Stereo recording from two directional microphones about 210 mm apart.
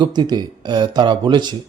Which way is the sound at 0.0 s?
20° right (ahead or behind).